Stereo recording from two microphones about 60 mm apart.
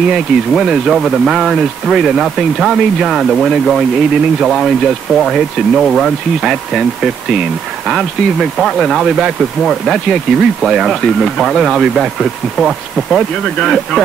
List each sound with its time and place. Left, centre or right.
0.0 s speech: centre
6.4 s speech: centre
8.4 s speech: centre
9.0 s speech: centre
9.6 s speech: centre